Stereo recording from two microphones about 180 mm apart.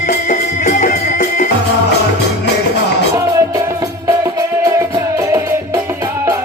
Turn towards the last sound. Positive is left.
turn(degrees=-15)  # may be behind; listen again after turning